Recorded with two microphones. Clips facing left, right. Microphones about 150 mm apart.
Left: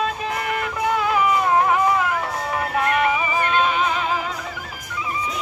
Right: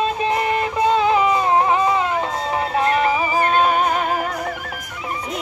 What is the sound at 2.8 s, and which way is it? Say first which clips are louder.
Music: right 2 dB; 30° right (ahead or behind).